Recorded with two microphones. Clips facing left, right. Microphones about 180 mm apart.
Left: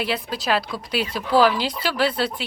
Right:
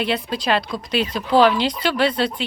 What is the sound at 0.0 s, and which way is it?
Speech, 5° left (ahead or behind).